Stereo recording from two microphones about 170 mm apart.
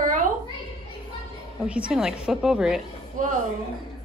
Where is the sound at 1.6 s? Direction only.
5° right (ahead or behind).